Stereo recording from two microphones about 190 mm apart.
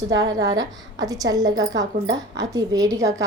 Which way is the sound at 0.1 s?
20° right (ahead or behind).